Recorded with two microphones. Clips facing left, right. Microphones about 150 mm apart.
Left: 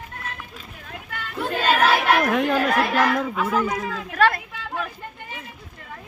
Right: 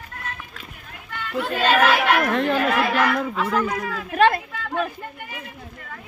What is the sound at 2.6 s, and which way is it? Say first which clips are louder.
Speech: even; 40° left (ahead or behind).